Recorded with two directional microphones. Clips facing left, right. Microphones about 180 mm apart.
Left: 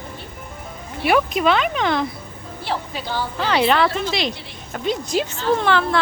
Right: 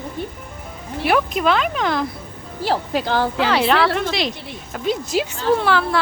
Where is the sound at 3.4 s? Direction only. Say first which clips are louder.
Left 2 dB; centre (ahead or behind).